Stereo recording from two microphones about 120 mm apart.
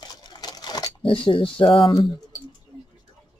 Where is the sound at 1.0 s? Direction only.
45° left (ahead or behind).